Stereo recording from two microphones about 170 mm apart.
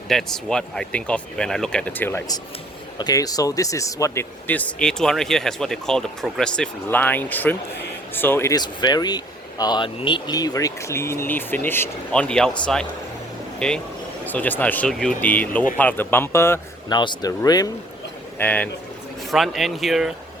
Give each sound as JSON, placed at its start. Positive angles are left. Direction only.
{"t": 0.1, "sound": "speech", "side_deg": 5}
{"t": 18.3, "sound": "speech", "side_deg": 10}